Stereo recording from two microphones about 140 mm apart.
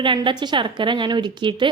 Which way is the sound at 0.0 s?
35° right (ahead or behind).